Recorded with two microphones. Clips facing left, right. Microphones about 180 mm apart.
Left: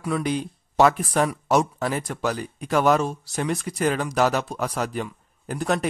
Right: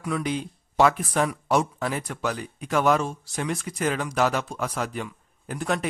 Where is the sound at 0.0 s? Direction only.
35° left (ahead or behind).